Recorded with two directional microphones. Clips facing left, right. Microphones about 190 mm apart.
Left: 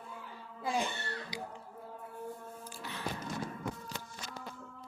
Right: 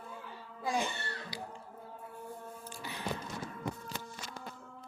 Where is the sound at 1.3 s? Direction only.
15° left (ahead or behind).